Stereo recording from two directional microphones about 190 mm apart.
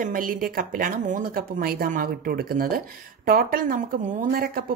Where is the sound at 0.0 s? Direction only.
45° right (ahead or behind).